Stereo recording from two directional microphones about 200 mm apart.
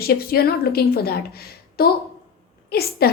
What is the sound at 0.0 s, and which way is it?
A woman's voice, 50° left (ahead or behind).